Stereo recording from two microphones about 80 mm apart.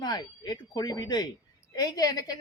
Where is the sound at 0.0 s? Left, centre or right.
Left.